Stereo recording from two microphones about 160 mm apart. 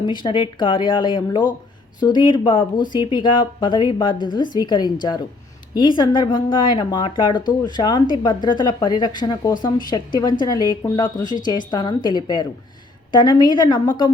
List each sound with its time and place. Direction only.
0.0 s speech: 30° left (ahead or behind)
6.0 s speech: 30° left (ahead or behind)